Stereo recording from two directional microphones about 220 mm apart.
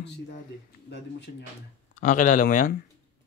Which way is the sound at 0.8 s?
50° left (ahead or behind).